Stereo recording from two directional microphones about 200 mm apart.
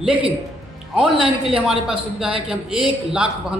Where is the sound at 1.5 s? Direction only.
5° right (ahead or behind).